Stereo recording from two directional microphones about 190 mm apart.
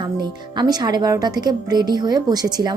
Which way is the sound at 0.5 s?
20° right (ahead or behind).